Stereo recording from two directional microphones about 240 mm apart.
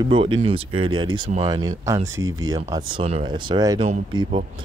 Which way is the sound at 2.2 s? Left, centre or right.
Right.